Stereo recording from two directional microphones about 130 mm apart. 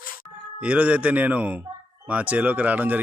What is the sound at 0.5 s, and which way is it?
Speech, 10° right (ahead or behind).